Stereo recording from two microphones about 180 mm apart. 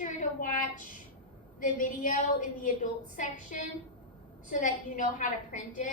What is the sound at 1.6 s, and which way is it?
A woman's voice, 50° left (ahead or behind).